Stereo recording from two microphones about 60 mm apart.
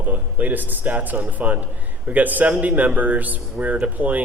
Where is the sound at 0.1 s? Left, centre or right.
Right.